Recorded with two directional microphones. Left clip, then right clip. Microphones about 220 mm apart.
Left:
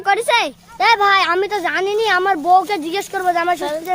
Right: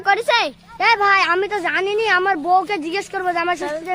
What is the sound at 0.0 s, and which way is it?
Speech, 30° left (ahead or behind).